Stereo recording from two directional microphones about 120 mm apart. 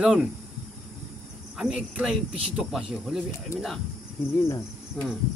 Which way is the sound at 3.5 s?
25° left (ahead or behind).